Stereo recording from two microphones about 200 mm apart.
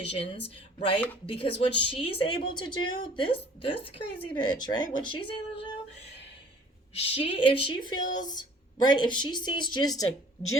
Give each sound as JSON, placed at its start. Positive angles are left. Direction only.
{"t": 0.1, "sound": "a woman's voice", "side_deg": 25}
{"t": 6.9, "sound": "a woman's voice", "side_deg": 25}